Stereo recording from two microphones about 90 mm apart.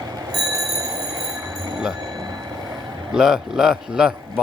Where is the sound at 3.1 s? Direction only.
5° right (ahead or behind).